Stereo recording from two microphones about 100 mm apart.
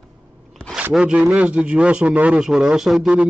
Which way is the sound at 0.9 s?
10° right (ahead or behind).